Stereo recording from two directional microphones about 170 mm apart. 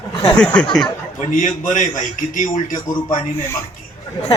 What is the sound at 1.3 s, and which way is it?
Speech, 50° left (ahead or behind).